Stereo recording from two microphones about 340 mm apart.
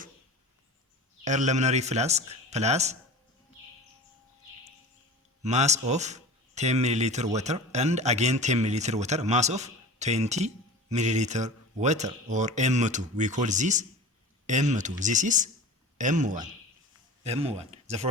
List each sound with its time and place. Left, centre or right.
1.2 s a man's voice: right
5.4 s a man's voice: centre